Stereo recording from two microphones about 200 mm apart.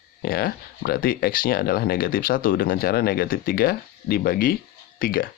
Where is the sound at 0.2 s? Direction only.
50° left (ahead or behind).